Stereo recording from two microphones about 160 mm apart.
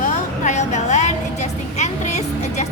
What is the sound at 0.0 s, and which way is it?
Vehicle, 50° left (ahead or behind).